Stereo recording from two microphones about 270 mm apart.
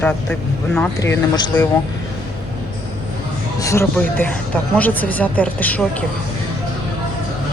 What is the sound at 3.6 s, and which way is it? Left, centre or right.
A woman's voice, centre.